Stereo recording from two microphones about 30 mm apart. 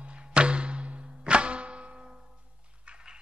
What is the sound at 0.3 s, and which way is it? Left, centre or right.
Music, right.